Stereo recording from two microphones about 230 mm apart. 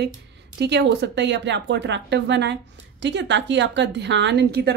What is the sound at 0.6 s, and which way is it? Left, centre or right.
A woman's voice, right.